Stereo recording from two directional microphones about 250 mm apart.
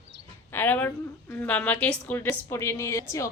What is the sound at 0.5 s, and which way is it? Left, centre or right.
A woman's voice, centre.